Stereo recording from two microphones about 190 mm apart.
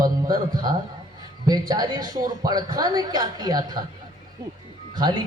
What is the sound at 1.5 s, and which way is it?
A man's voice, 20° right (ahead or behind).